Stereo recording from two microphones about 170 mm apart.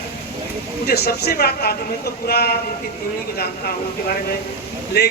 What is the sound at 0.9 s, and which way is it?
Speech, 70° left (ahead or behind).